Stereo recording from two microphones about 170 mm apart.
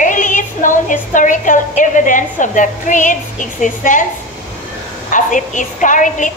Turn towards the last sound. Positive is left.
turn(degrees=50)  # may be behind; listen again after turning